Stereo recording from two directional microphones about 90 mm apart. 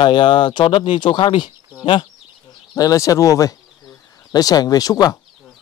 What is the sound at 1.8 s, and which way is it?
Speech, 75° left (ahead or behind).